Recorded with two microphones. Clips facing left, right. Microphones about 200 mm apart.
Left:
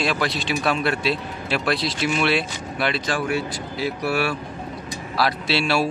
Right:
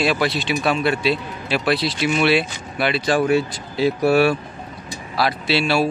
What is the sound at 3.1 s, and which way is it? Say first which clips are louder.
Speech: right 6 dB; 25° right (ahead or behind).